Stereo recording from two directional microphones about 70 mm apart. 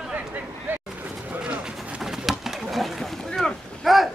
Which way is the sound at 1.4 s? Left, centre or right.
Centre.